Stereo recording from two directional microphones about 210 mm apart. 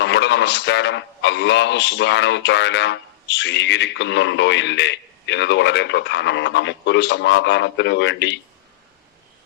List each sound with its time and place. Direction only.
0.0 s a man's voice: 55° left (ahead or behind)